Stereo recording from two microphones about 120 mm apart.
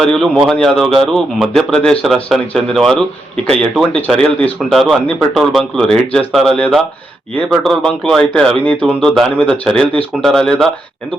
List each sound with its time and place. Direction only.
0.0 s speech: 5° left (ahead or behind)
4.7 s speech: centre (ahead or behind)